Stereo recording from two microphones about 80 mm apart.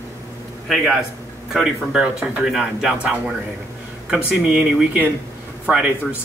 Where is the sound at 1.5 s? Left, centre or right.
Centre.